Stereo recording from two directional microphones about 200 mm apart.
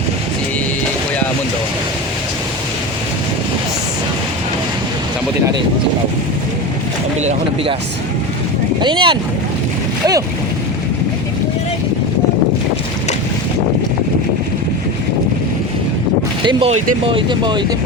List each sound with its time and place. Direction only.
7.2 s speech: 30° right (ahead or behind)
8.8 s speech: 25° right (ahead or behind)
16.4 s speech: 25° right (ahead or behind)